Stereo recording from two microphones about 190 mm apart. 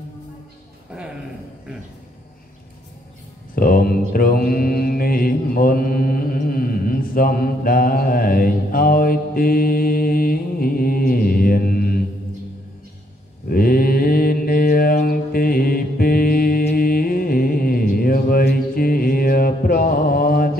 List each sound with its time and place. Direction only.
3.5 s mantra: 50° left (ahead or behind)
13.5 s mantra: 50° left (ahead or behind)